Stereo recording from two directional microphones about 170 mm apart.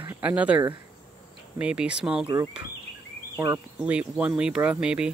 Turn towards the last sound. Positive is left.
turn(degrees=-5)  # may be behind; listen again after turning